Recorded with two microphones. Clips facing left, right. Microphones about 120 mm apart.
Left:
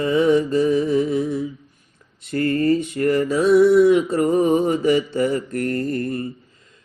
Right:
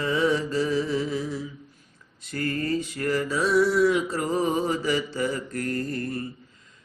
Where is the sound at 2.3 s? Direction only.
55° left (ahead or behind).